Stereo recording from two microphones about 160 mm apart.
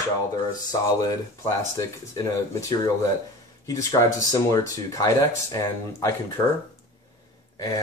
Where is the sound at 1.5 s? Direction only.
20° left (ahead or behind).